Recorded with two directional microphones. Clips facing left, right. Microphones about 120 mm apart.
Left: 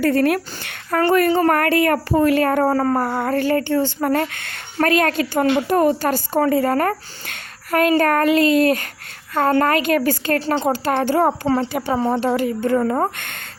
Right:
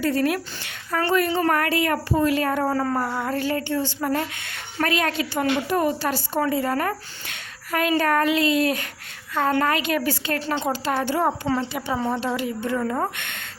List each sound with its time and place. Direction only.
0.0 s a woman's voice: 55° left (ahead or behind); by 10.8 s 35° left (ahead or behind)
10.8 s a woman's voice: 50° left (ahead or behind)